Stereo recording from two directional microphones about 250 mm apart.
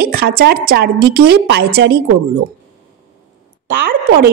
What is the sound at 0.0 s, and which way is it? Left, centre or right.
A woman's voice, right.